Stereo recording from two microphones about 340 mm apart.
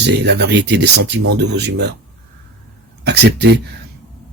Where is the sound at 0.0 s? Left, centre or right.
Right.